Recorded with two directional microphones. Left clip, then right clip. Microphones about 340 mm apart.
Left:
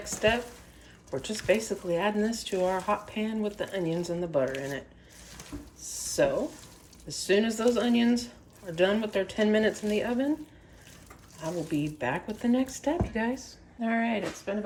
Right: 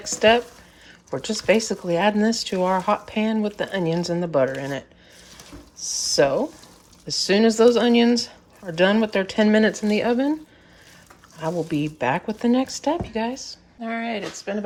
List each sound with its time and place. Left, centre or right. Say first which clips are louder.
0.2 s speech: right 10 dB; centre
6.2 s speech: right 6 dB; centre
11.3 s speech: right 7 dB; centre